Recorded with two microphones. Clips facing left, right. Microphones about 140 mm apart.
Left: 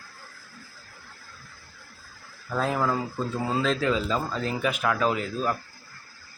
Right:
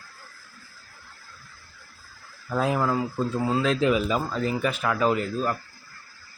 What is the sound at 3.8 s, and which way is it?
Speech, 15° right (ahead or behind).